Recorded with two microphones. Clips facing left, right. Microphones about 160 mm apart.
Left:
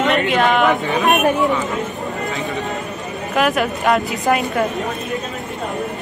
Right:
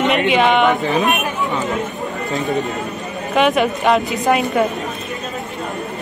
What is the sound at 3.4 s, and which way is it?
A woman's voice, centre (ahead or behind).